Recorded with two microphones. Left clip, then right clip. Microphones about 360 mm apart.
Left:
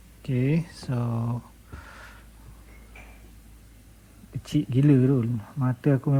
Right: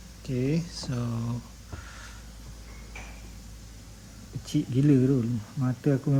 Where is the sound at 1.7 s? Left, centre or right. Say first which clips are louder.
Even; centre.